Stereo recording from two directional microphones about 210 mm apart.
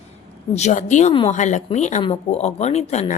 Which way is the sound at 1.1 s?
25° left (ahead or behind).